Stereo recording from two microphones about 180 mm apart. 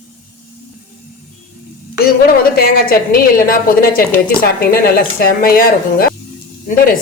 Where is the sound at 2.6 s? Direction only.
60° left (ahead or behind).